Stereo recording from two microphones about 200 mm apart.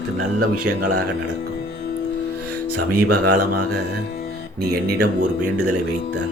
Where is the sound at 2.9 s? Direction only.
45° right (ahead or behind).